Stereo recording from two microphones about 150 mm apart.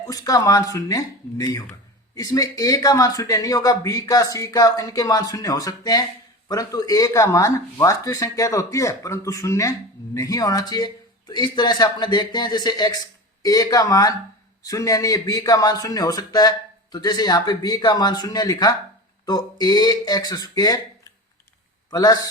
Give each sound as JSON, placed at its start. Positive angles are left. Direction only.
{"t": 0.0, "sound": "a man's voice", "side_deg": 20}